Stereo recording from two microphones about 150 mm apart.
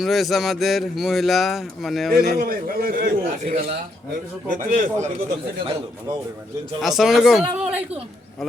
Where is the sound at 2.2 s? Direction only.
85° right.